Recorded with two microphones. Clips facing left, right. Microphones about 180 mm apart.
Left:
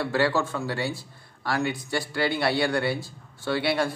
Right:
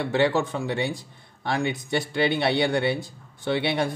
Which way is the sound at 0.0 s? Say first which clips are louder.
Right 2 dB; 20° right (ahead or behind).